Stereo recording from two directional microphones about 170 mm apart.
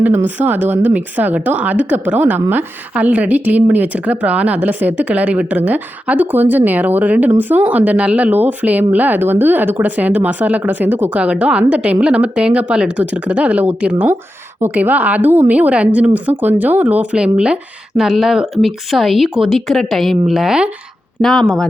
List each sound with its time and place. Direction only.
0.0 s a woman's voice: 10° right (ahead or behind)